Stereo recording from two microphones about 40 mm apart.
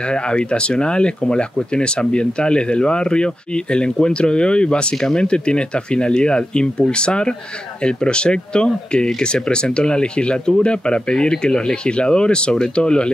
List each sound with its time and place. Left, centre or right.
0.1 s speech: left